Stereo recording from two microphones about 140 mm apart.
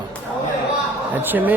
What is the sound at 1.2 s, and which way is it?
Speech, 15° right (ahead or behind).